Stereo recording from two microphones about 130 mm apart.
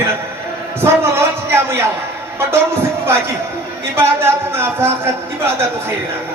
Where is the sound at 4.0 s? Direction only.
20° right (ahead or behind).